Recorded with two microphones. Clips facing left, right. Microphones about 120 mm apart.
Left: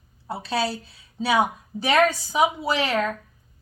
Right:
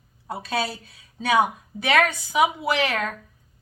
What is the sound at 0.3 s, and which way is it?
Speech, 30° left (ahead or behind).